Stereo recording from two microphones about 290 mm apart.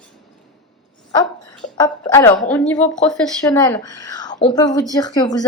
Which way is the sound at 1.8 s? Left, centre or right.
Centre.